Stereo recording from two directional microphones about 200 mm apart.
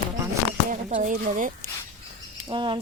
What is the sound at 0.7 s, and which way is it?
Speech, 35° right (ahead or behind).